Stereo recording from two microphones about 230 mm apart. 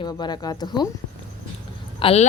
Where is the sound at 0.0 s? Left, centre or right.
Centre.